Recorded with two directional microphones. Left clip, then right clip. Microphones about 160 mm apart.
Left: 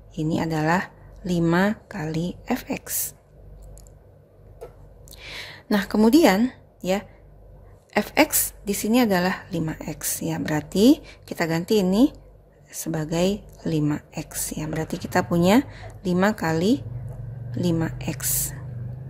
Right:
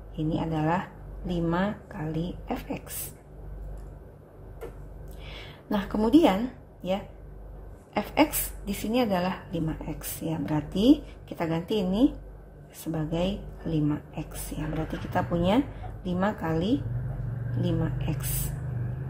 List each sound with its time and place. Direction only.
0.1 s speech: 70° left (ahead or behind)
5.2 s a woman's voice: 70° left (ahead or behind)